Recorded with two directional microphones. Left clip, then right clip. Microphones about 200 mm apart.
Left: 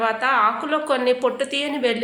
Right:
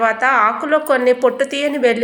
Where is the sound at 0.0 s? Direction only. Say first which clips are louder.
Right 5 dB; 15° right (ahead or behind).